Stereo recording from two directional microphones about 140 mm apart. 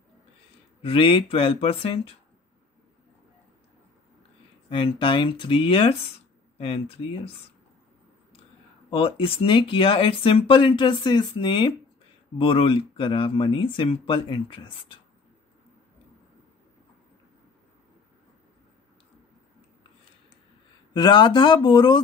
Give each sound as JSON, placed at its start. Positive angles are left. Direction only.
{"t": 0.8, "sound": "speech", "side_deg": 40}
{"t": 4.6, "sound": "speech", "side_deg": 35}
{"t": 8.9, "sound": "speech", "side_deg": 40}
{"t": 20.9, "sound": "speech", "side_deg": 35}